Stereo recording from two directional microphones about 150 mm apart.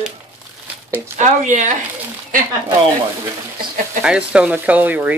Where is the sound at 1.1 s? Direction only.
55° right (ahead or behind).